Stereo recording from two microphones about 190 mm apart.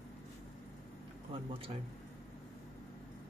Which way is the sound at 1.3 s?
30° right (ahead or behind).